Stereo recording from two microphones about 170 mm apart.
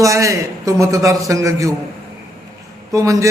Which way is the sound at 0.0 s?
20° right (ahead or behind).